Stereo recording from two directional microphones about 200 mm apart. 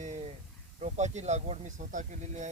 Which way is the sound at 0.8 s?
35° right (ahead or behind).